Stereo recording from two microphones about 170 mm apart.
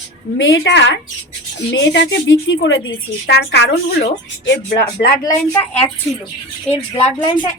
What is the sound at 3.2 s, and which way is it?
Speech, 80° left.